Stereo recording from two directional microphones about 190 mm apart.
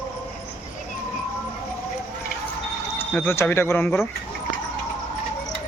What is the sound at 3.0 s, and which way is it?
Speech, 10° left (ahead or behind).